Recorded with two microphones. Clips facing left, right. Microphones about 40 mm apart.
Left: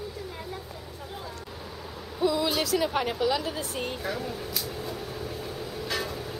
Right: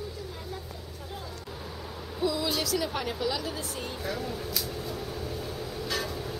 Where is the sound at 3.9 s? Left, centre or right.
Centre.